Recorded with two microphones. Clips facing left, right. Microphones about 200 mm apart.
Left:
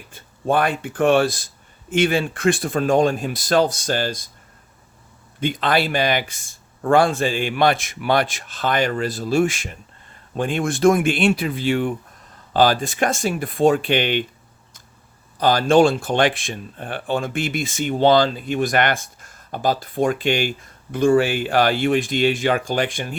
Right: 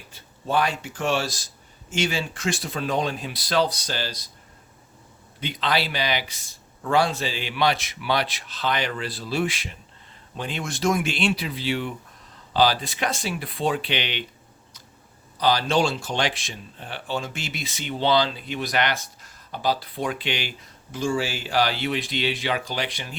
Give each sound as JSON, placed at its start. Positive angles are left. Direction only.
{"t": 0.1, "sound": "speech", "side_deg": 50}
{"t": 5.4, "sound": "speech", "side_deg": 50}
{"t": 15.4, "sound": "speech", "side_deg": 50}